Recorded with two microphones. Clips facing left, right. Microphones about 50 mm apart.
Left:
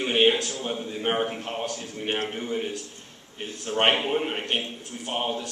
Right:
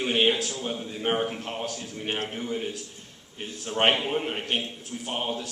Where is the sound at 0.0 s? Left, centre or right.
Centre.